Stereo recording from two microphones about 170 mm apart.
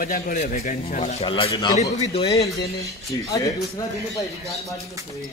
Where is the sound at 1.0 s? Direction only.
30° left (ahead or behind).